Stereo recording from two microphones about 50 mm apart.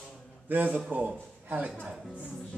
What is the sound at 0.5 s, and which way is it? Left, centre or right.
A man's voice, right.